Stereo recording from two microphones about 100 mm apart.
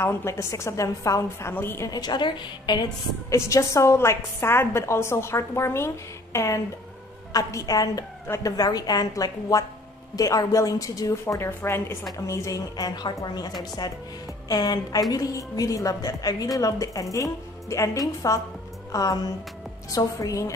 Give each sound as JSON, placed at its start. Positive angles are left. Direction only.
{"t": 0.0, "sound": "a woman's voice", "side_deg": 30}
{"t": 1.5, "sound": "a woman's voice", "side_deg": 25}
{"t": 1.9, "sound": "a woman's voice", "side_deg": 45}
{"t": 3.3, "sound": "a woman's voice", "side_deg": 30}